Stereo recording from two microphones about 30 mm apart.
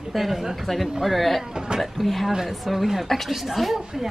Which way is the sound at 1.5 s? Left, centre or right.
Right.